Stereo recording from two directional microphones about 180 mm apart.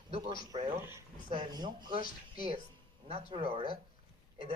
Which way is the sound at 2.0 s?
50° left (ahead or behind).